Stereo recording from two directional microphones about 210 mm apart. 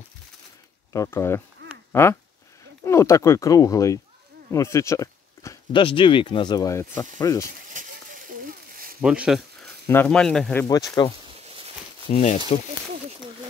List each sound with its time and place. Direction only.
0.9 s speech: 15° left (ahead or behind)
7.8 s a sound: 40° right (ahead or behind)
9.0 s speech: 5° right (ahead or behind)
9.8 s speech: 10° left (ahead or behind)
12.1 s speech: 35° left (ahead or behind)